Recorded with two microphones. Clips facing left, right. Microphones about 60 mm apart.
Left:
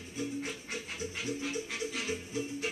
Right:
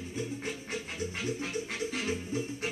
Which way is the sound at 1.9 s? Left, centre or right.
Right.